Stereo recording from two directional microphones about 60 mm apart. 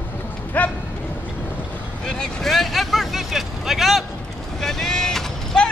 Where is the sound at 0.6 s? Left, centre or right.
Left.